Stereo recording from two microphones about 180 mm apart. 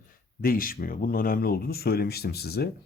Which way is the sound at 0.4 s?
50° left (ahead or behind).